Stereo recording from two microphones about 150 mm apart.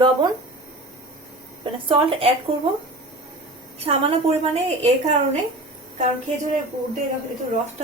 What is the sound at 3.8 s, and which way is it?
A woman's voice, 40° right (ahead or behind).